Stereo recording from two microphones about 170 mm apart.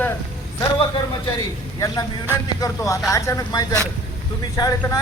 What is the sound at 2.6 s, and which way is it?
Speech, 20° left (ahead or behind).